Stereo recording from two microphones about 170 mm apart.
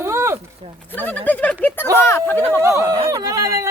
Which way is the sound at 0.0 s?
15° right (ahead or behind).